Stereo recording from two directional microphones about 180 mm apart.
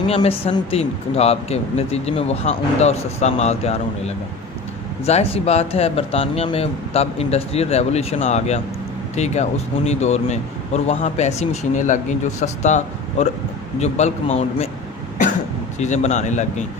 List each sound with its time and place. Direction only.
0.1 s speech: 35° left (ahead or behind)
15.8 s speech: 40° left (ahead or behind)